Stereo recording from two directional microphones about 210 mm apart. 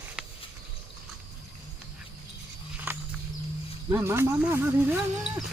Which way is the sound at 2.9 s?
10° right (ahead or behind).